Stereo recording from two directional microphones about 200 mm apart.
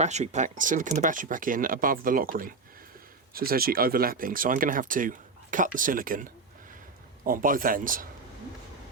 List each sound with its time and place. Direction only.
0.0 s speech: 35° right (ahead or behind)
7.3 s speech: 45° right (ahead or behind)